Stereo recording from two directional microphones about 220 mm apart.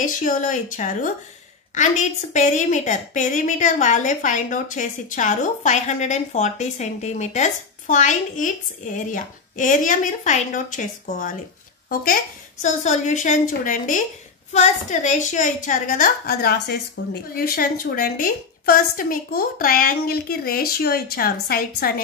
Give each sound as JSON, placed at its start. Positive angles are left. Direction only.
{"t": 0.0, "sound": "a woman's voice", "side_deg": 35}
{"t": 12.6, "sound": "a woman's voice", "side_deg": 30}